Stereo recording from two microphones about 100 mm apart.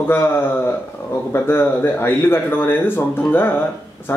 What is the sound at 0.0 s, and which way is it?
Speech, 20° left (ahead or behind).